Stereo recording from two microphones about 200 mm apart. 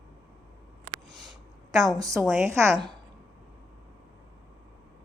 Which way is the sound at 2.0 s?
15° right (ahead or behind).